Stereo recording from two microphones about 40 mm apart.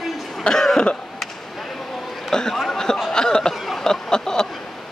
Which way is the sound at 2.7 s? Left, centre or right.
Centre.